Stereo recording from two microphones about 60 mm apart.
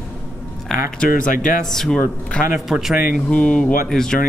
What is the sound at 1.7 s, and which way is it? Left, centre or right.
Speech, centre.